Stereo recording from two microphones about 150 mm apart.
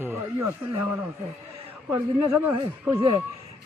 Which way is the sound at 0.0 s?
15° right (ahead or behind).